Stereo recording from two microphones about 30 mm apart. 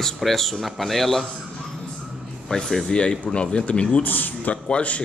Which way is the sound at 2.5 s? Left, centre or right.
Left.